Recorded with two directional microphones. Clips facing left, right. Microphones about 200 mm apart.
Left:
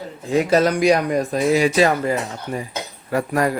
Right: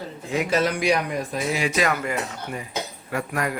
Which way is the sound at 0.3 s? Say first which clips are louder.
Left 6 dB; 35° left (ahead or behind).